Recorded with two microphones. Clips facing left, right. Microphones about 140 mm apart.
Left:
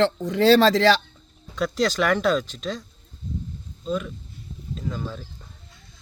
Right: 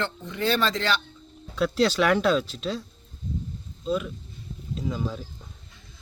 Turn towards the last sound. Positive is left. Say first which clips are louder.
# right 1 dB
turn(degrees=-10)  # may be behind; listen again after turning